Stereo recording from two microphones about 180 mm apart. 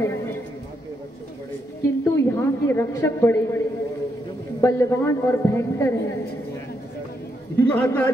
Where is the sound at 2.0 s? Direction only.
15° left (ahead or behind).